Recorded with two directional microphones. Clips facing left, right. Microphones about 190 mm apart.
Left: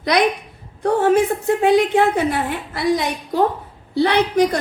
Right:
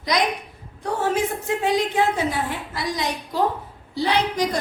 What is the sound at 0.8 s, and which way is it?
A woman's voice, 60° left (ahead or behind).